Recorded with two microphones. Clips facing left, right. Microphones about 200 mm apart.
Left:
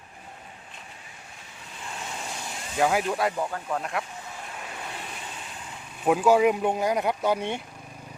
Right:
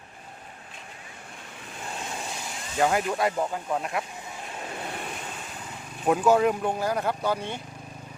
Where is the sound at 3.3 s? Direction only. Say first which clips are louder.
Right 1 dB; 10° right (ahead or behind).